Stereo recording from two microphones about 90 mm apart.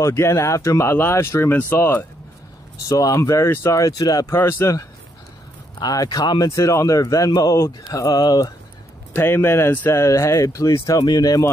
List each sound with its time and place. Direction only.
0.0 s speech: 35° left (ahead or behind)
2.9 s speech: 40° left (ahead or behind)
4.4 s speech: 30° left (ahead or behind)
5.8 s speech: 45° left (ahead or behind)
7.5 s speech: 35° left (ahead or behind)
8.1 s speech: 50° left (ahead or behind)
9.1 s speech: 25° left (ahead or behind); by 11.4 s 45° left (ahead or behind)